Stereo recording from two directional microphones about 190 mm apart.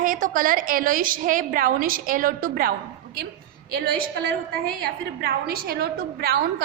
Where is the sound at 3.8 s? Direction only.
50° right (ahead or behind).